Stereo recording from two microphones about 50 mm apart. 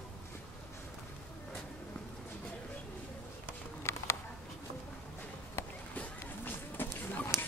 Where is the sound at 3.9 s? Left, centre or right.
Left.